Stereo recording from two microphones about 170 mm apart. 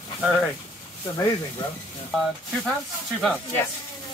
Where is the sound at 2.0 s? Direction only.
Centre (ahead or behind).